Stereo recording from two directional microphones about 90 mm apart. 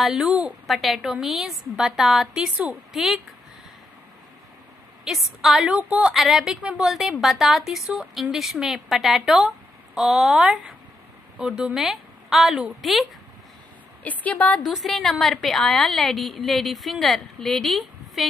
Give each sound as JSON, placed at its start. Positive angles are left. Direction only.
{"t": 0.0, "sound": "a woman's voice", "side_deg": -5}
{"t": 2.5, "sound": "a woman's voice", "side_deg": -20}
{"t": 2.9, "sound": "speech", "side_deg": -5}
{"t": 5.0, "sound": "a woman's voice", "side_deg": 0}
{"t": 5.8, "sound": "a woman's voice", "side_deg": -15}
{"t": 6.1, "sound": "a woman's voice", "side_deg": 0}
{"t": 14.0, "sound": "speech", "side_deg": 20}
{"t": 14.7, "sound": "a woman's voice", "side_deg": 0}